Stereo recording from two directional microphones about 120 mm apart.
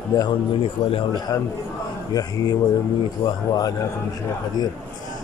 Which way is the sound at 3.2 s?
35° left (ahead or behind).